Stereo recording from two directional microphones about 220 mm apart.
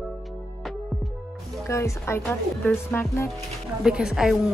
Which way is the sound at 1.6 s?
10° left (ahead or behind).